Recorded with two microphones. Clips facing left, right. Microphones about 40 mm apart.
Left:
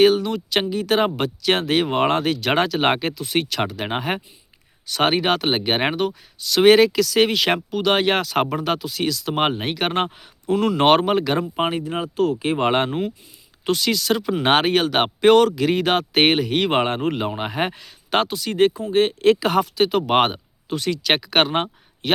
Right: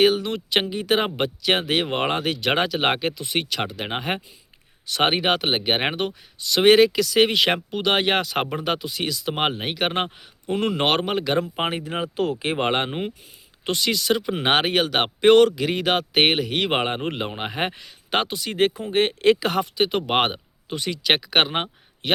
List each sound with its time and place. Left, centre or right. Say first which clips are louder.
0.0 s speech: left 3 dB; centre
0.3 s speech: left 1 dB; right; by 4.2 s centre
4.9 s speech: left 1 dB; centre
9.4 s speech: left 2 dB; centre
10.8 s speech: left 8 dB; centre
11.5 s speech: left 3 dB; right
12.0 s speech: left 4 dB; centre
12.9 s speech: left 4 dB; right
13.7 s speech: left 2 dB; centre